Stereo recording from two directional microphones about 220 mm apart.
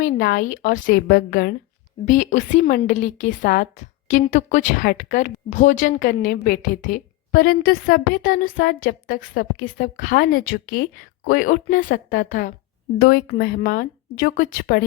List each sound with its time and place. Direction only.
0.0 s a woman's voice: 45° left (ahead or behind)